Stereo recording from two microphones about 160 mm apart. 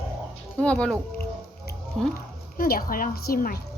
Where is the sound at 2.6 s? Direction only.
65° left (ahead or behind).